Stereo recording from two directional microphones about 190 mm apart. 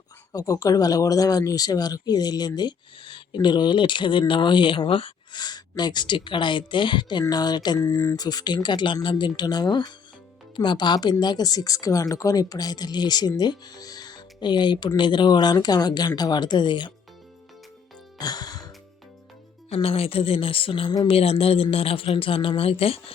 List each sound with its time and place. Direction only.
0.3 s speech: 15° left (ahead or behind)
18.2 s music: 20° left (ahead or behind)
19.7 s speech: 30° left (ahead or behind)